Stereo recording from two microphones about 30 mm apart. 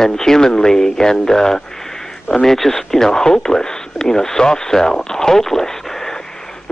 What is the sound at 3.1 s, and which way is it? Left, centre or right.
Speech, left.